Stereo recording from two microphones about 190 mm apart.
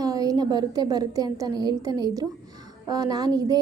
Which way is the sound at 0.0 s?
20° right (ahead or behind).